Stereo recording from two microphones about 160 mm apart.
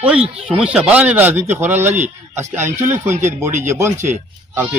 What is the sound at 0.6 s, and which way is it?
A man's voice, 5° right (ahead or behind).